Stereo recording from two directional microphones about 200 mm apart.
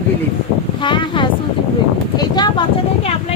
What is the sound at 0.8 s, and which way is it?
Speech, 25° left (ahead or behind).